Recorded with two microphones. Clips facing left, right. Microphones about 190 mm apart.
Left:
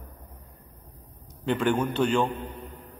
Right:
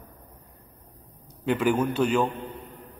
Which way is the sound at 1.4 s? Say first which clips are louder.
Right 1 dB; 5° right (ahead or behind).